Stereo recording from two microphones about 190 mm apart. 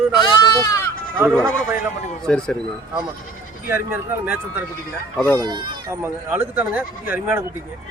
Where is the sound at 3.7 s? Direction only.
10° right (ahead or behind).